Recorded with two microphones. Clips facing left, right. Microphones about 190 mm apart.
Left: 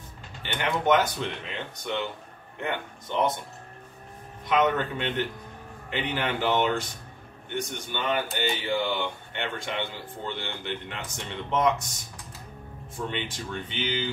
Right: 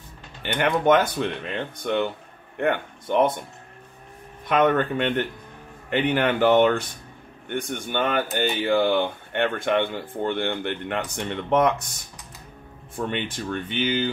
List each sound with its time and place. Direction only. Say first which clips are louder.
0.4 s speech: right 6 dB; 55° right (ahead or behind)
4.5 s speech: right 4 dB; 55° right (ahead or behind)
13.1 s speech: right 5 dB; 55° right (ahead or behind)